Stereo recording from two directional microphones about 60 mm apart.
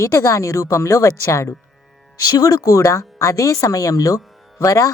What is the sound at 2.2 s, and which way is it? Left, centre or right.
Speech, left.